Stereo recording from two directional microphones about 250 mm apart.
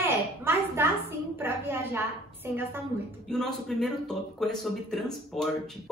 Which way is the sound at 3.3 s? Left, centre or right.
Centre.